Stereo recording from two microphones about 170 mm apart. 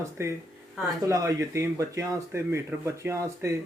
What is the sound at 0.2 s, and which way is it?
Speech, 15° right (ahead or behind).